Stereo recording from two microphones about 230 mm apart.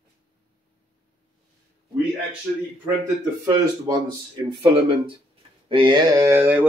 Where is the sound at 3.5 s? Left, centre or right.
Centre.